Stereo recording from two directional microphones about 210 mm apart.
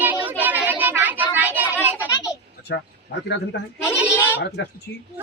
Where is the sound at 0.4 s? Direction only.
10° right (ahead or behind).